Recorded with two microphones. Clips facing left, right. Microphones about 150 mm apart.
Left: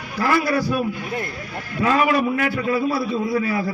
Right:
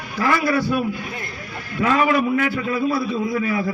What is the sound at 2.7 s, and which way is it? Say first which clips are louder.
Speech: even; 35° left (ahead or behind).